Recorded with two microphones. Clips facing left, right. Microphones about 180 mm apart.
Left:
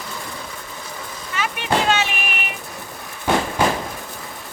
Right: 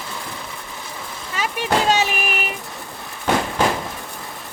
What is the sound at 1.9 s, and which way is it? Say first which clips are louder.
Child singing: right 2 dB; 40° right (ahead or behind).